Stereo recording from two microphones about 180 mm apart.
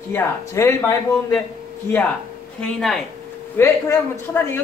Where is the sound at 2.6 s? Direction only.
5° left (ahead or behind).